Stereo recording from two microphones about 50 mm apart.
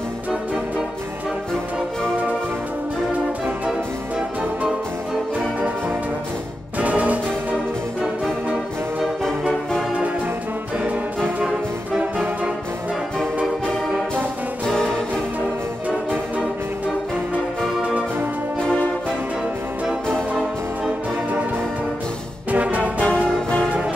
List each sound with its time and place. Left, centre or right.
6.8 s music: right
9.5 s music: centre
11.4 s music: centre
14.7 s music: centre
22.5 s music: right
22.9 s music: left